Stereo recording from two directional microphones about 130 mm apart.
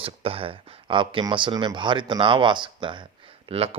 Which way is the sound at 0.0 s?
45° right (ahead or behind).